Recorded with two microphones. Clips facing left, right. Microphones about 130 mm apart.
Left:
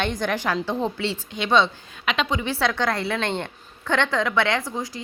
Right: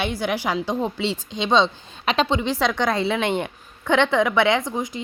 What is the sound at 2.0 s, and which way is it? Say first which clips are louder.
A woman's voice: right 4 dB; 30° right (ahead or behind).